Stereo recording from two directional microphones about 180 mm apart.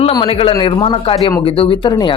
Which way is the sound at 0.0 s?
30° left (ahead or behind).